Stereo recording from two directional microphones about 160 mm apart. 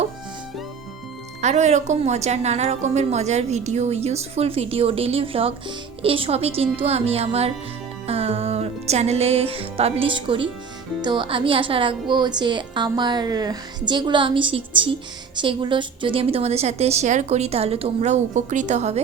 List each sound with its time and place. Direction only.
1.4 s a woman's voice: 45° right (ahead or behind)